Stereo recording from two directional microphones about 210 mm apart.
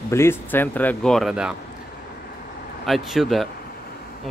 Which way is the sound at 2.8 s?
Centre (ahead or behind).